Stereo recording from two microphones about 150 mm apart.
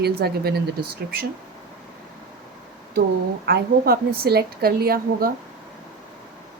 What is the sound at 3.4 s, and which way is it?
A woman's voice, 90° right.